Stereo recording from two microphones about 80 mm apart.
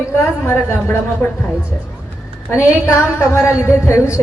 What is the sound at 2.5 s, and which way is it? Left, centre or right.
A woman's voice, left.